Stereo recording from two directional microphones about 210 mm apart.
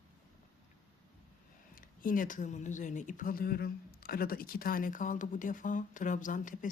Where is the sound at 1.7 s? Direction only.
40° left (ahead or behind).